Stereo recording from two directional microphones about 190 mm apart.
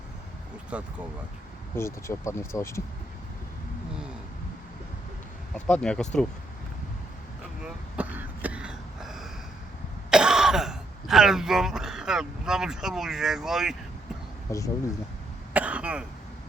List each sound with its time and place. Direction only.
0.7 s speech: 5° right (ahead or behind)
1.7 s speech: 15° left (ahead or behind)
5.5 s speech: 5° left (ahead or behind)
7.6 s throat clearing: 10° right (ahead or behind)
14.5 s speech: 15° left (ahead or behind)
15.5 s cough: 5° right (ahead or behind)